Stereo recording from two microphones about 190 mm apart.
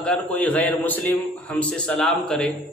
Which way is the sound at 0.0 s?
5° left (ahead or behind).